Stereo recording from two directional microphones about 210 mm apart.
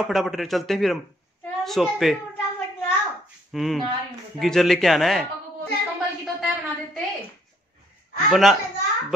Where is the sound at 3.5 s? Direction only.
Centre (ahead or behind).